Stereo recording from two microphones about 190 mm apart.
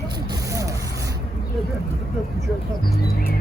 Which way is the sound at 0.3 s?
15° right (ahead or behind).